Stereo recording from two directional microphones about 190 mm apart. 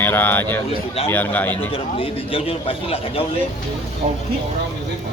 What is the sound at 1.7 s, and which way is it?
A man's voice, 30° left (ahead or behind).